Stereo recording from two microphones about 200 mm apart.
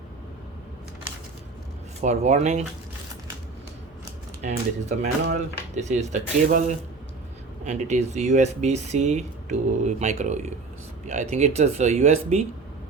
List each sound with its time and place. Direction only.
2.0 s speech: 35° right (ahead or behind)
4.4 s speech: 35° right (ahead or behind)
7.6 s speech: 35° right (ahead or behind)